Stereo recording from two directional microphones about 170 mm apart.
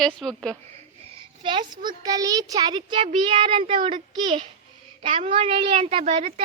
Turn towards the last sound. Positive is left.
turn(degrees=-40)  # may be behind; listen again after turning